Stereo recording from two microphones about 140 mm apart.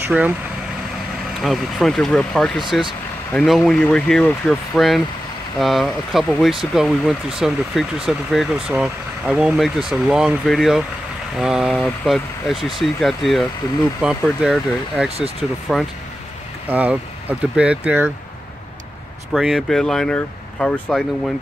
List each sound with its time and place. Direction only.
0.0 s speech: 10° right (ahead or behind)
1.4 s speech: centre (ahead or behind)
15.0 s speech: 45° right (ahead or behind)
15.7 s speech: centre (ahead or behind)
16.6 s speech: 10° right (ahead or behind)
19.3 s speech: centre (ahead or behind)